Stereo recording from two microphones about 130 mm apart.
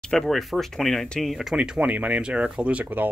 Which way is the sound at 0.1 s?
5° left (ahead or behind).